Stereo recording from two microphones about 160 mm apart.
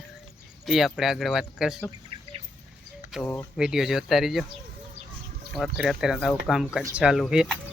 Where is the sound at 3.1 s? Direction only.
Centre (ahead or behind).